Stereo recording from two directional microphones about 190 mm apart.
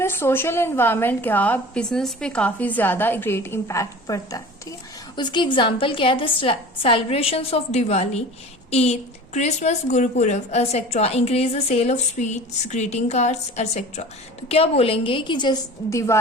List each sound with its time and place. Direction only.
0.0 s a woman's voice: 10° left (ahead or behind)